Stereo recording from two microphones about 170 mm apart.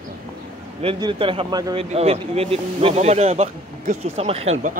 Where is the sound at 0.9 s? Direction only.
25° right (ahead or behind).